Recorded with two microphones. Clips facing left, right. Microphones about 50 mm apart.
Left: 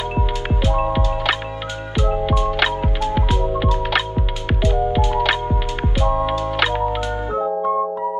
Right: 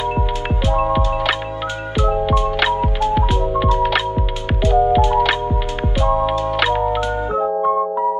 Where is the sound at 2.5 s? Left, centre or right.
Centre.